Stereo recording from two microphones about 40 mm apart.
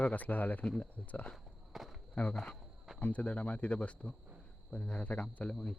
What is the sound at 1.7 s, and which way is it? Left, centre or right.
Walk, centre.